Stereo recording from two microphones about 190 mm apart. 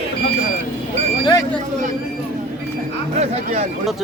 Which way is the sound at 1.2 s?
20° left (ahead or behind).